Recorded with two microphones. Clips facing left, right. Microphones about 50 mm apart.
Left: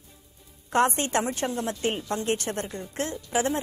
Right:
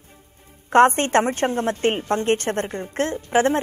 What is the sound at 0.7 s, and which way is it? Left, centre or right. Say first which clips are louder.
A woman's voice: right 8 dB; right.